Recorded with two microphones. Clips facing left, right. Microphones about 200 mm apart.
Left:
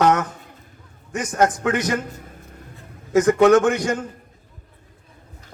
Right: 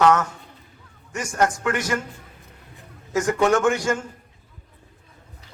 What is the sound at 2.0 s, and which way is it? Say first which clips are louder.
Music: left 5 dB; 45° left (ahead or behind).